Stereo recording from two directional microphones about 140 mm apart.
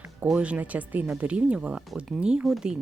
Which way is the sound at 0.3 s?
10° right (ahead or behind).